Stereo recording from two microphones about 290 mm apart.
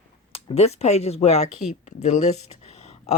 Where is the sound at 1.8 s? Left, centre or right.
Left.